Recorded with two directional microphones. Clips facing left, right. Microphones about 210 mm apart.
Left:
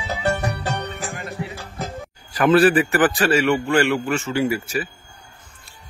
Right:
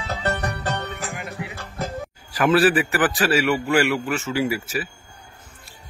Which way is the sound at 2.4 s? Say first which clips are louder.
Left 3 dB; centre (ahead or behind).